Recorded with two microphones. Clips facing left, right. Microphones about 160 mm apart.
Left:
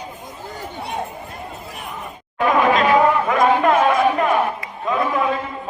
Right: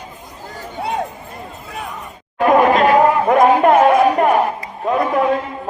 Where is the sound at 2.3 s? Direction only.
40° right (ahead or behind).